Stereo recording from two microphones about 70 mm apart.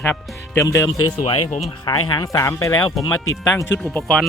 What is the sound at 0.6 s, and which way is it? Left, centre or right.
Speech, left.